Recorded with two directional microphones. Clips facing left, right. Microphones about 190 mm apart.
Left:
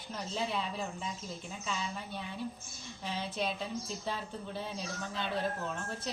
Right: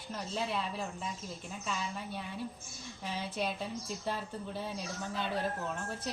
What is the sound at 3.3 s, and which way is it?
Speech, 10° right (ahead or behind).